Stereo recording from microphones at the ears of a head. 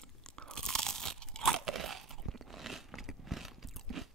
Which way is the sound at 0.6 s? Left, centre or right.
Right.